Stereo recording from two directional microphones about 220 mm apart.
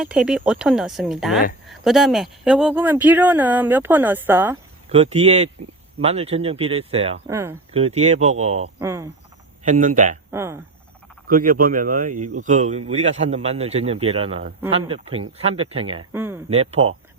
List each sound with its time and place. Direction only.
0.0 s speech: 5° right (ahead or behind)
4.9 s a man's voice: 30° right (ahead or behind)
7.3 s speech: 10° right (ahead or behind)
7.7 s a man's voice: 25° right (ahead or behind)
8.8 s speech: 10° right (ahead or behind)
9.6 s speech: 35° right (ahead or behind)
10.3 s speech: 10° right (ahead or behind)
11.3 s a man's voice: 40° right (ahead or behind)
16.1 s speech: 10° right (ahead or behind)
16.5 s a man's voice: 30° right (ahead or behind)